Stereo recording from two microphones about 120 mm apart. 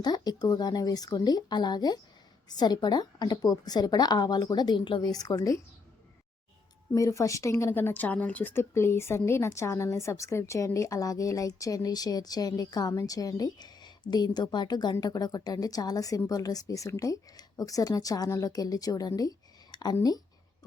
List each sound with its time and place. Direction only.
0.0 s a woman's voice: 35° left (ahead or behind)
6.9 s a woman's voice: 25° left (ahead or behind)